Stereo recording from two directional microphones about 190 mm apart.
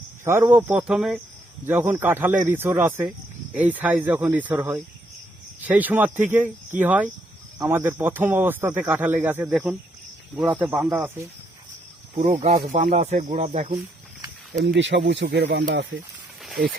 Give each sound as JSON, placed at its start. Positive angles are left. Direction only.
{"t": 0.3, "sound": "speech", "side_deg": -10}
{"t": 12.8, "sound": "speech", "side_deg": -35}
{"t": 14.5, "sound": "speech", "side_deg": -70}